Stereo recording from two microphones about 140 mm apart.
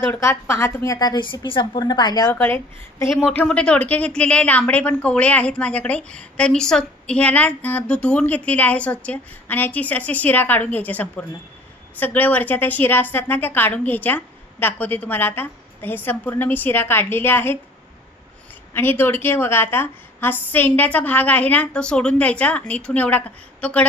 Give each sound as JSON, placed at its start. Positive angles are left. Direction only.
{"t": 0.0, "sound": "a woman's voice", "side_deg": 20}
{"t": 2.3, "sound": "a woman's voice", "side_deg": 15}
{"t": 18.7, "sound": "a woman's voice", "side_deg": 15}